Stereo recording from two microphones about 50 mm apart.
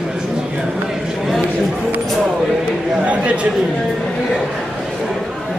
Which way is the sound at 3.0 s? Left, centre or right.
Right.